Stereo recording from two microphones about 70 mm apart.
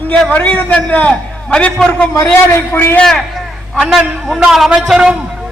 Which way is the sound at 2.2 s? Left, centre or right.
Left.